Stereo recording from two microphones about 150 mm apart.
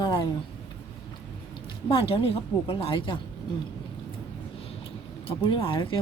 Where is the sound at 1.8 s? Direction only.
40° left (ahead or behind).